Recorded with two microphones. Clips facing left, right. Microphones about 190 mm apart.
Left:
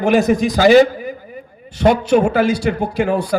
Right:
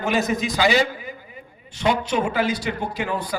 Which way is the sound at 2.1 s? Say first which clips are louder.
Left 8 dB; 45° left (ahead or behind).